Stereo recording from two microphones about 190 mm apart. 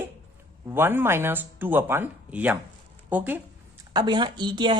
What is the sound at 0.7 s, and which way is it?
Speech, 10° right (ahead or behind).